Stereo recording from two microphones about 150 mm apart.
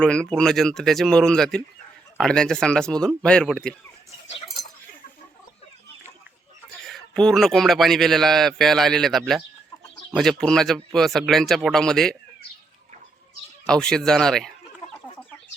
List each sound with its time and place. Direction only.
0.0 s a man's voice: 5° left (ahead or behind)
6.7 s a man's voice: centre (ahead or behind)
13.7 s a man's voice: 5° left (ahead or behind)